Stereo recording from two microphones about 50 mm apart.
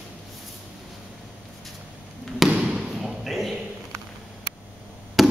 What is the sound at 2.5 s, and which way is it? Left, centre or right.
Basketball bounce, right.